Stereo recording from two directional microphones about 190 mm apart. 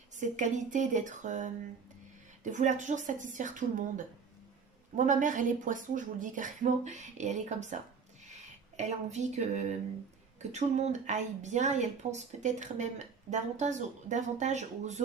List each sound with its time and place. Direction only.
0.2 s speech: 40° right (ahead or behind)